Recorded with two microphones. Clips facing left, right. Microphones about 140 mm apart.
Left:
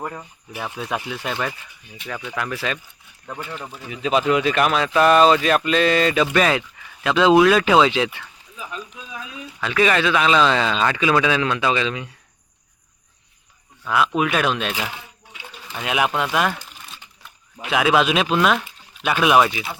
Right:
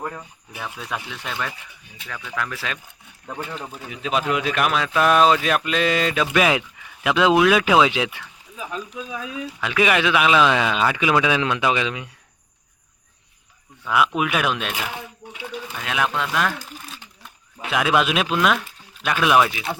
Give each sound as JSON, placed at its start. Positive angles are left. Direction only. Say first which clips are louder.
{"t": 0.0, "sound": "speech", "louder": "left 1 dB", "side_deg": 10}
{"t": 2.0, "sound": "speech", "louder": "left 2 dB", "side_deg": 20}
{"t": 3.5, "sound": "speech", "louder": "even", "side_deg": 0}
{"t": 9.6, "sound": "speech", "louder": "left 1 dB", "side_deg": -10}
{"t": 14.2, "sound": "speech", "louder": "left 2 dB", "side_deg": -5}
{"t": 15.8, "sound": "speech", "louder": "left 3 dB", "side_deg": 10}
{"t": 17.7, "sound": "speech", "louder": "left 2 dB", "side_deg": 0}